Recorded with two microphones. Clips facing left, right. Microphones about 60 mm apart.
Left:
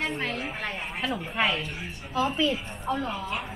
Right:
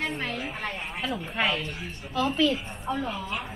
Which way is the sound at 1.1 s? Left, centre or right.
Centre.